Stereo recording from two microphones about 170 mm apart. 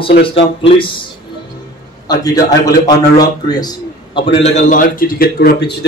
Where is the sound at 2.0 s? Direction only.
20° left (ahead or behind).